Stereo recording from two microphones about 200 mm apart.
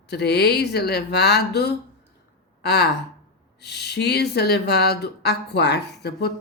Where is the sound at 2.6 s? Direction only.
55° left (ahead or behind).